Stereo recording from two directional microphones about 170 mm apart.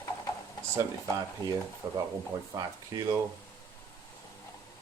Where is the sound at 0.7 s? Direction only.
20° right (ahead or behind).